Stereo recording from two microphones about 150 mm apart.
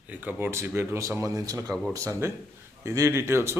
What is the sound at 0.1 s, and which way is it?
Speech, 10° right (ahead or behind).